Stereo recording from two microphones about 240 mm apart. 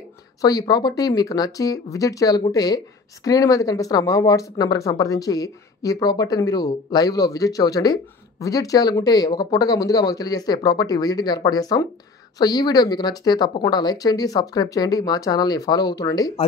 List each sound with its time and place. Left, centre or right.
0.4 s speech: centre